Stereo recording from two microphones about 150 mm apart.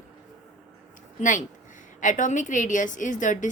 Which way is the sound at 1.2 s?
55° left (ahead or behind).